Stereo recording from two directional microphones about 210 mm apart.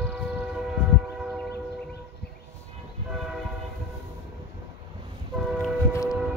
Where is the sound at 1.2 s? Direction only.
Centre (ahead or behind).